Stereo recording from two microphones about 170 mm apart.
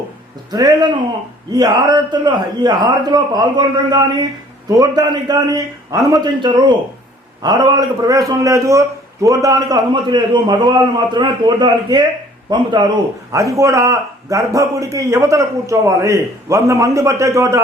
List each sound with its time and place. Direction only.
0.5 s a man's voice: 25° right (ahead or behind)